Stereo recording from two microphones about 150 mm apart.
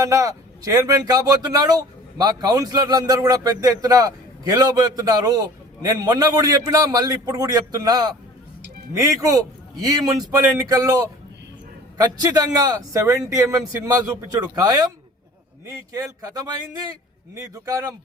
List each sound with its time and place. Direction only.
0.0 s speech: 20° right (ahead or behind)